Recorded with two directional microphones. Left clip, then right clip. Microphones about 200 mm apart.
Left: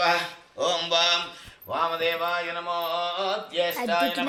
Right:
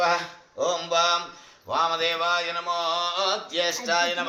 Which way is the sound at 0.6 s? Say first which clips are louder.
Even; 55° right (ahead or behind).